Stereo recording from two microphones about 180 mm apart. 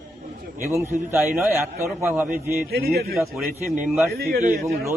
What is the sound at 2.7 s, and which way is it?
Speech, 60° right (ahead or behind).